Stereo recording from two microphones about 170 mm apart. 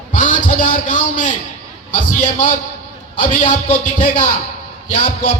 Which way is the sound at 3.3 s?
50° left (ahead or behind).